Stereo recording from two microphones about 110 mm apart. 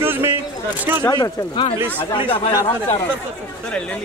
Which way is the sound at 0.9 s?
20° right (ahead or behind).